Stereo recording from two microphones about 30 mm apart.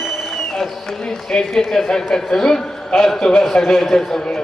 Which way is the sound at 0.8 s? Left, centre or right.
Centre.